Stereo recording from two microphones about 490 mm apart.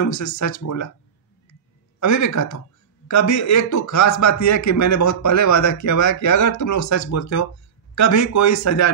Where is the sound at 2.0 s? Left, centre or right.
Left.